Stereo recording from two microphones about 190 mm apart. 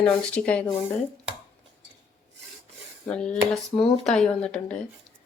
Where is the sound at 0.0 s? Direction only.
10° left (ahead or behind).